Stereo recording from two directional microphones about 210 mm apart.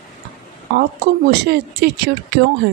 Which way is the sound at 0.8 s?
50° right (ahead or behind).